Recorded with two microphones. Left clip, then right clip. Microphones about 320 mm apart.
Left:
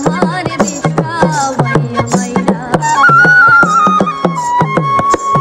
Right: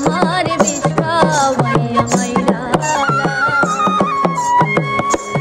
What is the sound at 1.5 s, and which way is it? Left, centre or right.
Music, left.